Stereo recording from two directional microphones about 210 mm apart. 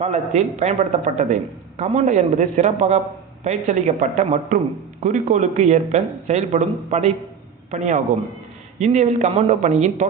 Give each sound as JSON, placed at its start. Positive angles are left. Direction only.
{"t": 0.0, "sound": "speech", "side_deg": -30}